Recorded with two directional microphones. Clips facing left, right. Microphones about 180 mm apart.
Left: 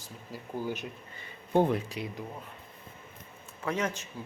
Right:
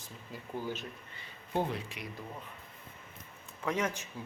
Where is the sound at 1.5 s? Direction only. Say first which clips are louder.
Left 8 dB; 50° left (ahead or behind).